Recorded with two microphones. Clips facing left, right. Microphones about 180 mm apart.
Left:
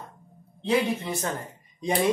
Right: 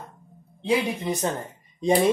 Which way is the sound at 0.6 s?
15° right (ahead or behind).